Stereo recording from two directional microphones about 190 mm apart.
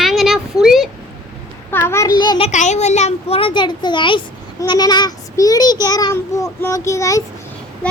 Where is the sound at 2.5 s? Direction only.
40° left (ahead or behind).